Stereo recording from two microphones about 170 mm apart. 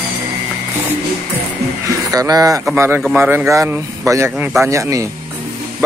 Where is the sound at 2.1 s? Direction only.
20° right (ahead or behind).